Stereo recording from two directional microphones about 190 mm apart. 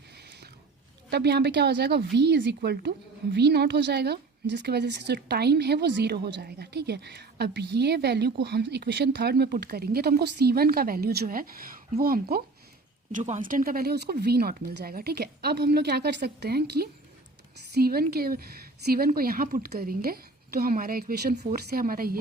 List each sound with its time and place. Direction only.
1.1 s a woman's voice: 60° right (ahead or behind)
13.1 s a woman's voice: 40° right (ahead or behind)